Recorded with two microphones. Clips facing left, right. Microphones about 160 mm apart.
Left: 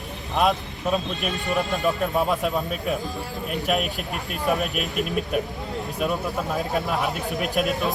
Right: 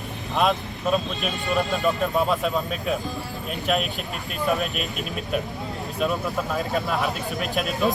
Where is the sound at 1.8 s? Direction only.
Centre (ahead or behind).